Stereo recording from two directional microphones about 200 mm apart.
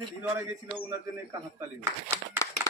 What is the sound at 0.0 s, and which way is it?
Speech, 15° right (ahead or behind).